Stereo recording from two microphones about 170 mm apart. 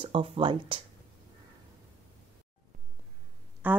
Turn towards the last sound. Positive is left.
turn(degrees=-10)  # may be behind; listen again after turning